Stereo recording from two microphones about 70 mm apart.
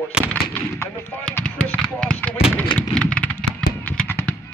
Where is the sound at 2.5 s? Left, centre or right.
Centre.